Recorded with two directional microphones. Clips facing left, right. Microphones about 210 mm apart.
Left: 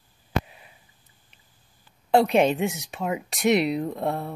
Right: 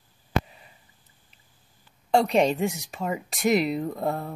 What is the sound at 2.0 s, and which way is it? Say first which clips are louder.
Speech: left 2 dB; centre (ahead or behind).